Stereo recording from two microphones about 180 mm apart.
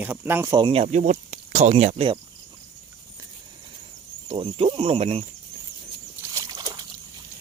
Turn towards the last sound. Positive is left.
turn(degrees=-25)  # may be behind; listen again after turning